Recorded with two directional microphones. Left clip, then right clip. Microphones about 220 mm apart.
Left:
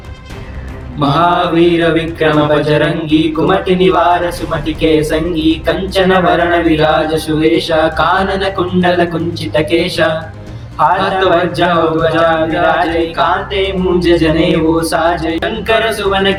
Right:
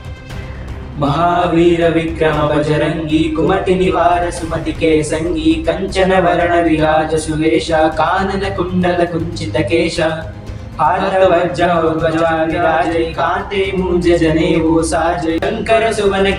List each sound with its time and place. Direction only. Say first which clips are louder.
1.0 s a man's voice: left 3 dB; 45° left (ahead or behind)